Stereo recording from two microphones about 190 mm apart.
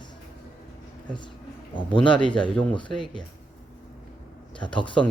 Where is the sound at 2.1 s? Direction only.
5° left (ahead or behind).